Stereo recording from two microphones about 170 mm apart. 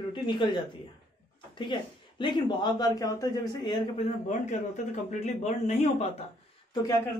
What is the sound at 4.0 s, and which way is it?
A man's voice, 45° left (ahead or behind).